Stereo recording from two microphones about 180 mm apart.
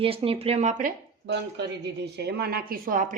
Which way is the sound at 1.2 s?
70° right (ahead or behind).